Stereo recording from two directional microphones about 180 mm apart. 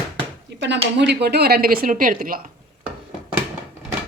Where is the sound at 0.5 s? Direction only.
75° right (ahead or behind).